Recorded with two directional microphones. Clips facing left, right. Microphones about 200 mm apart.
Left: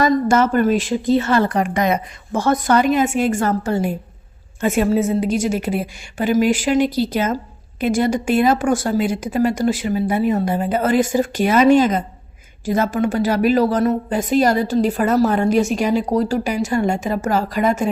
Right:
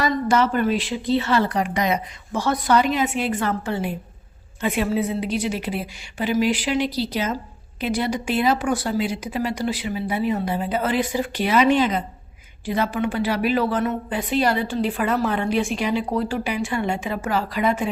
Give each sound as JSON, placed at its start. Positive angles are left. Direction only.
{"t": 0.0, "sound": "a woman's voice", "side_deg": 45}